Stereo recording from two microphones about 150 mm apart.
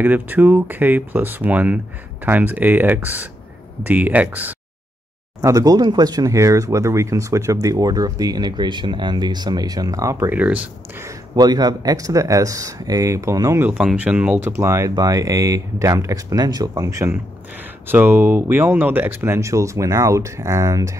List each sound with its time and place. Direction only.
0.0 s speech: 10° right (ahead or behind)
5.4 s speech: 25° right (ahead or behind)
11.1 s speech: 25° right (ahead or behind)
13.7 s speech: 5° right (ahead or behind)